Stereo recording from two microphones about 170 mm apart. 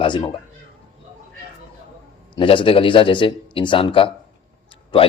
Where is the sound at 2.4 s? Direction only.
30° left (ahead or behind).